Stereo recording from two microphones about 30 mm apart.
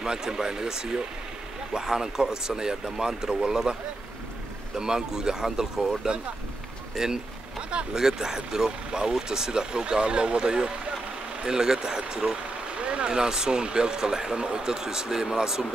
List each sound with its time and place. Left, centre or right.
0.0 s speech: right
4.7 s speech: right
7.0 s speech: centre
12.7 s speech: right; by 15.6 s centre